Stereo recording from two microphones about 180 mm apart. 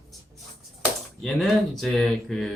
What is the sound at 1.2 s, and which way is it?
Speech, centre (ahead or behind).